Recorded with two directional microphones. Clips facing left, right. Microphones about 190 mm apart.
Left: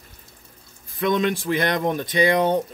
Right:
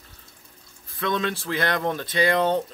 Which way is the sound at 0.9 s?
15° left (ahead or behind).